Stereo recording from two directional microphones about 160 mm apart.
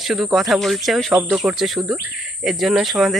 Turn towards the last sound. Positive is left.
turn(degrees=0)  # may be behind; listen again after turning